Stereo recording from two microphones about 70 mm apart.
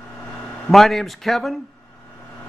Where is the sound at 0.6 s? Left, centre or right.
Centre.